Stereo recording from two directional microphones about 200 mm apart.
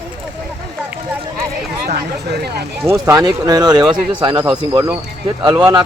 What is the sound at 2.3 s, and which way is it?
Speech, 55° right (ahead or behind).